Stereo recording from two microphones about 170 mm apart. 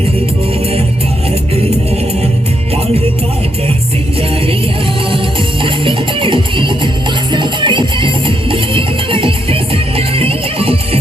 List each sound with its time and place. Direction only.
5.6 s music: 30° right (ahead or behind)